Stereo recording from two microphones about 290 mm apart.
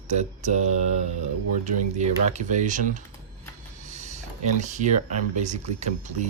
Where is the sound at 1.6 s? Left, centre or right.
Right.